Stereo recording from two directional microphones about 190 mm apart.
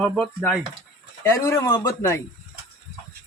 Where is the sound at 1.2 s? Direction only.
15° left (ahead or behind).